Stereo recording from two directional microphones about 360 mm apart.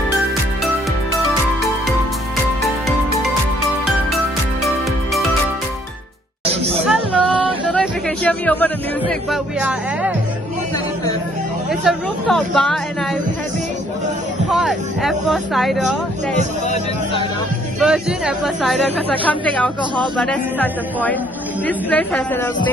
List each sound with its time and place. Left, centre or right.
6.4 s music: centre
6.9 s a sound: centre
9.3 s music: centre
11.7 s a sound: centre
14.5 s vehicle: centre
16.6 s hubbub: centre
17.7 s speech: centre